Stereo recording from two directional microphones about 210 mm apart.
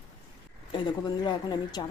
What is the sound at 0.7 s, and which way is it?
A woman's voice, 20° left (ahead or behind).